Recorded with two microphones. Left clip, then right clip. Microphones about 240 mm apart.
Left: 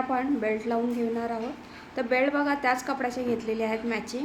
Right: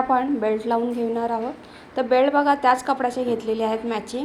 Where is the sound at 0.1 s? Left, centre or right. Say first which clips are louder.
Right 6 dB; centre.